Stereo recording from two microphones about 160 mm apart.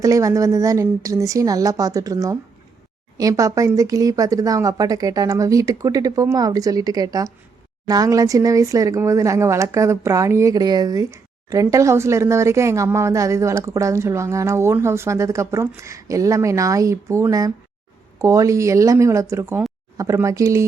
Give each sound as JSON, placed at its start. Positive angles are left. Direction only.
{"t": 0.0, "sound": "speech", "side_deg": -20}